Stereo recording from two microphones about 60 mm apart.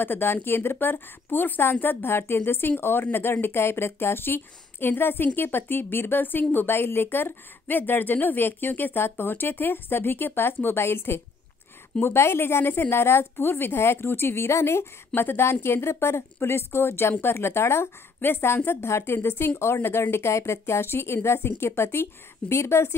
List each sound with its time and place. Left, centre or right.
0.0 s speech: left